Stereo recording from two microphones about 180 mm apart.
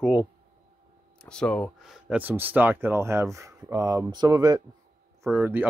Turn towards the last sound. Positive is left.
turn(degrees=-10)  # may be behind; listen again after turning